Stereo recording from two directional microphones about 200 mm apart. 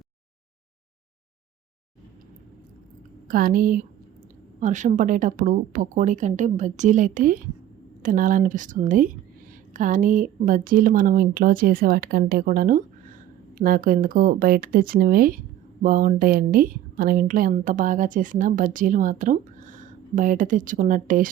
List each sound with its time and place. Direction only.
3.2 s speech: 45° right (ahead or behind)